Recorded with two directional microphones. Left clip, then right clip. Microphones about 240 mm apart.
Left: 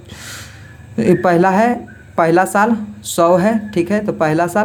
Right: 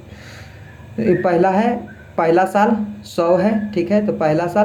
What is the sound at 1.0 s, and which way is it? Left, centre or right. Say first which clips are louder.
Speech: left 3 dB; left.